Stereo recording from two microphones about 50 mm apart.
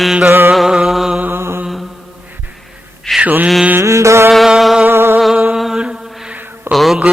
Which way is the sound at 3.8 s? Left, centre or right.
Right.